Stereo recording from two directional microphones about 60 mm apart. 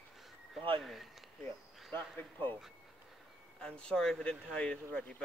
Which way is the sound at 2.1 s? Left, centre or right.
Left.